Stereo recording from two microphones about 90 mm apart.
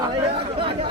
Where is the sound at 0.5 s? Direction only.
90° right.